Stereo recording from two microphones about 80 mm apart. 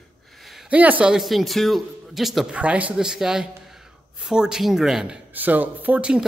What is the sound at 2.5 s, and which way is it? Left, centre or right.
Speech, centre.